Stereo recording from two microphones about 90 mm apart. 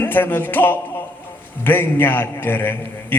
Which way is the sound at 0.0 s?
20° left (ahead or behind).